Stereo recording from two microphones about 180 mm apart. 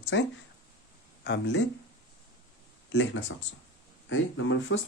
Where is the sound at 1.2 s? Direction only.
75° left (ahead or behind).